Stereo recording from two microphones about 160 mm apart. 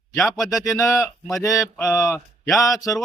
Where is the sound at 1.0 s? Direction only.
Centre (ahead or behind).